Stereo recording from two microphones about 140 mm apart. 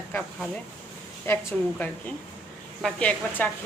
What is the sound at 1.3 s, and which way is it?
A woman's voice, 15° left (ahead or behind).